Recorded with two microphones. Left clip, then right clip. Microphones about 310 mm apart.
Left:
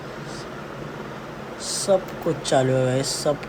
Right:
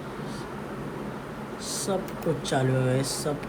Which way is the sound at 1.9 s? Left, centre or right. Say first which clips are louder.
Left 8 dB; centre.